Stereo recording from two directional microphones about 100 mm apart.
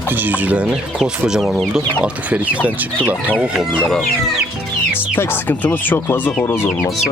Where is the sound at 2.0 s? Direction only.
15° right (ahead or behind).